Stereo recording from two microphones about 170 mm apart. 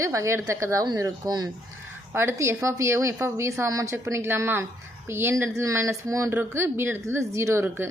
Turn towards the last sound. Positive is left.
turn(degrees=-15)  # may be behind; listen again after turning